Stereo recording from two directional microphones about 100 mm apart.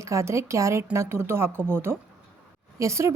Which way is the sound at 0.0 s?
30° right (ahead or behind).